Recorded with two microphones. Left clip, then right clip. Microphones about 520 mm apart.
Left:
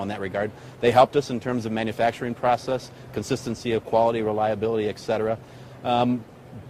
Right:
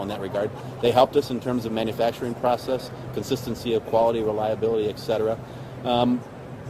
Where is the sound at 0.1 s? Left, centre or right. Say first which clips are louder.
Right 1 dB; left.